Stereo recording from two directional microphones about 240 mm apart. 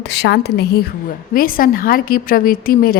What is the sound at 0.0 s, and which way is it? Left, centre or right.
A woman's voice, left.